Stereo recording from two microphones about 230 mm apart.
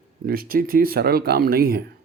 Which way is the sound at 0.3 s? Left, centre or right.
Right.